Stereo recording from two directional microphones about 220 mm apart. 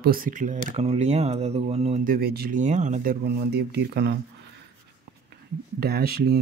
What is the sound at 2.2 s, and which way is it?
Speech, 45° right (ahead or behind).